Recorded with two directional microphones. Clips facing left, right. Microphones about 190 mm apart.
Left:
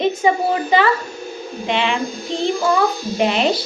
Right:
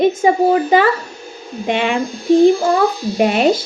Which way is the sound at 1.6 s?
50° right (ahead or behind).